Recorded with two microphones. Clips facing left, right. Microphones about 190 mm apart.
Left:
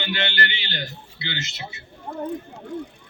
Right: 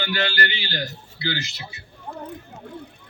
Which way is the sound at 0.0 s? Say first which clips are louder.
Right 2 dB; 25° left (ahead or behind).